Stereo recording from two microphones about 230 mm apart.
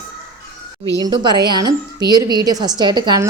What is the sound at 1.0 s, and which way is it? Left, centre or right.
A woman's voice, centre.